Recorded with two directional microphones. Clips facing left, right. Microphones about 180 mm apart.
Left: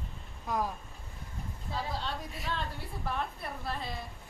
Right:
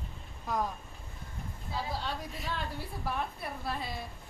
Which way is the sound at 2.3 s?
5° right (ahead or behind).